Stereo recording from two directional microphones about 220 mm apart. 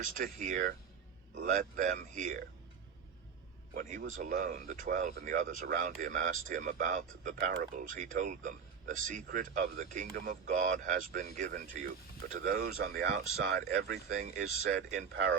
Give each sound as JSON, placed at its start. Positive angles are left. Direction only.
{"t": 0.0, "sound": "speech", "side_deg": -35}
{"t": 3.8, "sound": "speech", "side_deg": -35}